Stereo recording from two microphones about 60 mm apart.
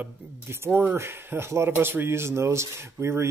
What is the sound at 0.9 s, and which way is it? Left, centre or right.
A man's voice, right.